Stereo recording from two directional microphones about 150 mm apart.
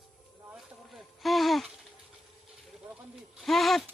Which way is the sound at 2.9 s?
Centre (ahead or behind).